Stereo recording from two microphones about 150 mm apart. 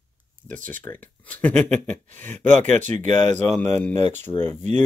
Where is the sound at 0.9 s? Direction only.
10° left (ahead or behind).